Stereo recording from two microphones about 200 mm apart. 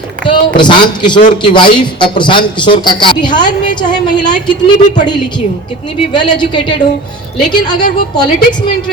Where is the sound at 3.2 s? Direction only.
40° left (ahead or behind).